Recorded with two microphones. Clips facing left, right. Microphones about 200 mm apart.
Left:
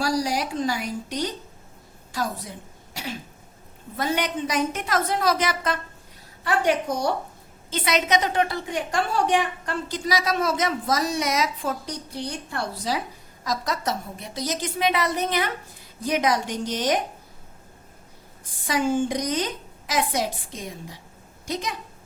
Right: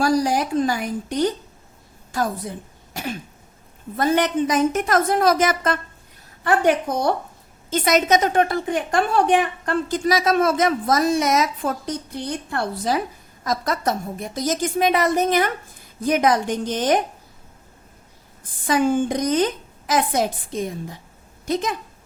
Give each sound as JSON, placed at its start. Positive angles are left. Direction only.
{"t": 0.0, "sound": "a woman's voice", "side_deg": -50}
{"t": 2.9, "sound": "cough", "side_deg": -50}
{"t": 3.9, "sound": "a woman's voice", "side_deg": -50}
{"t": 7.7, "sound": "a woman's voice", "side_deg": -45}
{"t": 18.6, "sound": "a woman's voice", "side_deg": -55}